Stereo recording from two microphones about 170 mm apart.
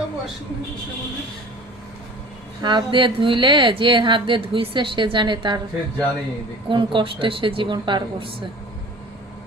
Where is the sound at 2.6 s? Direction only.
25° right (ahead or behind).